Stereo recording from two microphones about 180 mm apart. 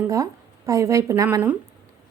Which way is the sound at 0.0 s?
15° right (ahead or behind).